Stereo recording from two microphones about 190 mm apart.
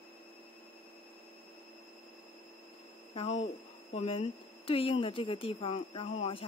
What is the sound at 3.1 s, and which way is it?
Speech, 30° left (ahead or behind).